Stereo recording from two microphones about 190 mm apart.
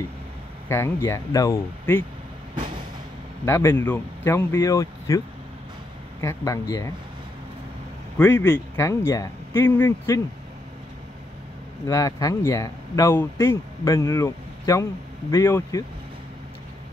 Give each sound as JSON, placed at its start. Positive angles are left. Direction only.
{"t": 0.7, "sound": "speech", "side_deg": 15}
{"t": 3.4, "sound": "speech", "side_deg": 15}
{"t": 6.2, "sound": "speech", "side_deg": 15}
{"t": 8.2, "sound": "speech", "side_deg": 10}
{"t": 11.9, "sound": "speech", "side_deg": 20}